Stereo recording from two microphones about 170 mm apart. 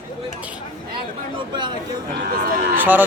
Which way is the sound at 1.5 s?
25° right (ahead or behind).